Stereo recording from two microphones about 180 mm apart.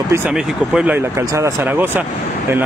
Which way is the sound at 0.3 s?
5° right (ahead or behind).